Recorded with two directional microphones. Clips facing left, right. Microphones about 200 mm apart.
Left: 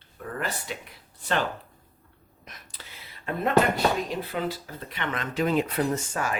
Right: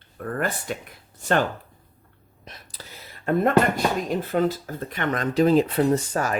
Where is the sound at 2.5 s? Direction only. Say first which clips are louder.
Right 4 dB; 40° right (ahead or behind).